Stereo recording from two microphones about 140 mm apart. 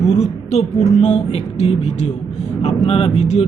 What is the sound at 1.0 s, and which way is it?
A man's voice, 50° left (ahead or behind).